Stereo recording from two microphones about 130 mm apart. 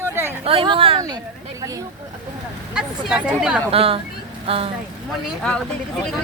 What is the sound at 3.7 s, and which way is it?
Speech, 45° right (ahead or behind).